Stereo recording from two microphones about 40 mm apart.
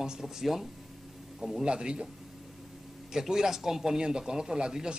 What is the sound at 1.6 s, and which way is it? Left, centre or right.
Speech, right.